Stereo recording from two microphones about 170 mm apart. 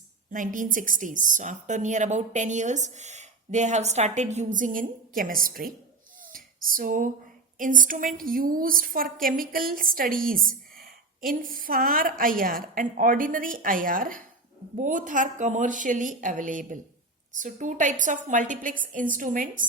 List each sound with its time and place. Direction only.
0.3 s a woman's voice: 50° right (ahead or behind)
6.3 s a sound: 55° right (ahead or behind)
7.6 s a woman's voice: 50° right (ahead or behind)